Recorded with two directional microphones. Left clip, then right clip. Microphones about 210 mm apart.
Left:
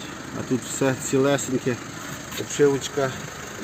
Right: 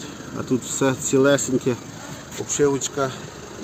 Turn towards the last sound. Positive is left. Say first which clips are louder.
# even
turn(degrees=0)  # may be behind; listen again after turning